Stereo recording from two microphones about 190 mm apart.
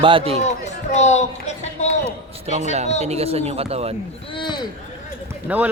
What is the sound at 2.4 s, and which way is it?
Speech, 35° right (ahead or behind).